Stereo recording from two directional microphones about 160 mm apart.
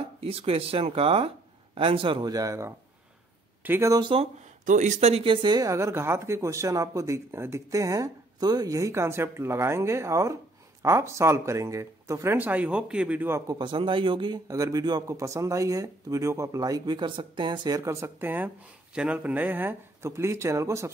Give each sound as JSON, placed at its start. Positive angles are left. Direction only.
{"t": 0.2, "sound": "speech", "side_deg": -35}
{"t": 4.6, "sound": "speech", "side_deg": -50}
{"t": 13.5, "sound": "speech", "side_deg": -30}